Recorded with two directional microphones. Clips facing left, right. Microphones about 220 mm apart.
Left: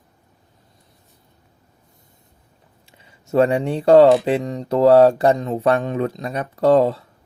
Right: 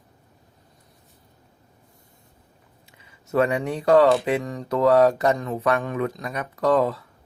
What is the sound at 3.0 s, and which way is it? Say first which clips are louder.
Speech: left 5 dB; 30° left (ahead or behind).